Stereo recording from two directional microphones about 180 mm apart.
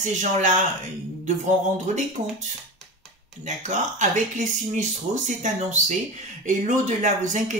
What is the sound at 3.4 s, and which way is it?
Speech, 40° right (ahead or behind).